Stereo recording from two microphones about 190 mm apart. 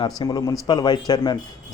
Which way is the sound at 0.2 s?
20° left (ahead or behind).